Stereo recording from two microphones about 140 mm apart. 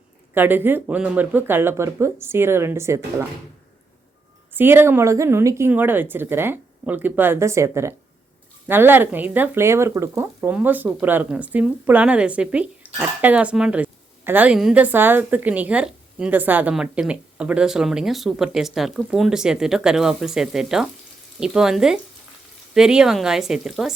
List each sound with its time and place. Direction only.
0.3 s speech: 15° right (ahead or behind)
4.5 s speech: 15° right (ahead or behind)